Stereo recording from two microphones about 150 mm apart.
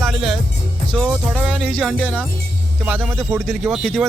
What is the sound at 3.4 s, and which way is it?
Speech, centre (ahead or behind).